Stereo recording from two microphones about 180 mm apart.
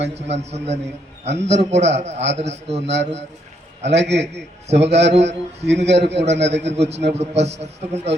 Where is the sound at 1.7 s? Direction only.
70° right (ahead or behind).